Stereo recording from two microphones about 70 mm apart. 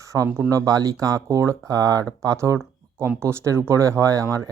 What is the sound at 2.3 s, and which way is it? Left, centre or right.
Speech, right.